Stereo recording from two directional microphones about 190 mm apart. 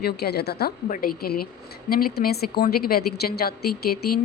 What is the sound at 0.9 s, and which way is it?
A woman's voice, 45° left (ahead or behind).